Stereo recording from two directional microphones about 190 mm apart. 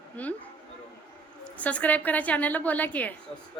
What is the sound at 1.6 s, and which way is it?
A woman's voice, 5° left (ahead or behind).